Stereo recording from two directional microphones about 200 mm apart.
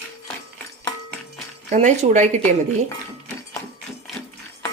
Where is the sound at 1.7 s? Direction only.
35° right (ahead or behind).